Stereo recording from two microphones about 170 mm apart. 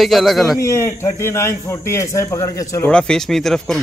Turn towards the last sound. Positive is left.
turn(degrees=0)  # may be behind; listen again after turning